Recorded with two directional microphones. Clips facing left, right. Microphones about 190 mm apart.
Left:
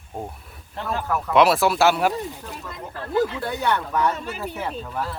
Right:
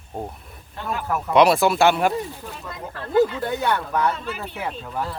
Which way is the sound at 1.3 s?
Centre (ahead or behind).